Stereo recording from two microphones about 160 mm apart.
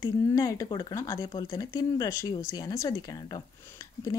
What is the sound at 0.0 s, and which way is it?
Speech, 20° left (ahead or behind).